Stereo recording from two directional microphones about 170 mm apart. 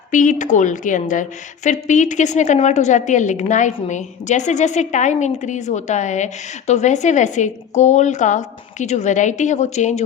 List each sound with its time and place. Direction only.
0.1 s a woman's voice: 50° left (ahead or behind)